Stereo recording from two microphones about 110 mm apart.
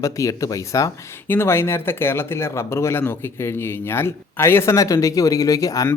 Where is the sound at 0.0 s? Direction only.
30° left (ahead or behind).